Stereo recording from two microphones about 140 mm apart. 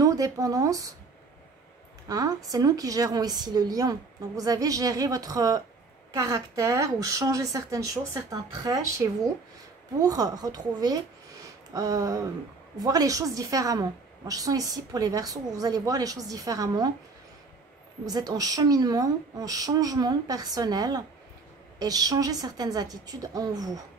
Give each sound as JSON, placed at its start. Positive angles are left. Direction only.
{"t": 0.0, "sound": "speech", "side_deg": -25}
{"t": 2.0, "sound": "a woman's voice", "side_deg": -25}
{"t": 18.0, "sound": "a woman's voice", "side_deg": -25}